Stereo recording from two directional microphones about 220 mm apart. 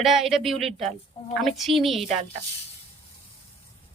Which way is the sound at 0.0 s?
Centre (ahead or behind).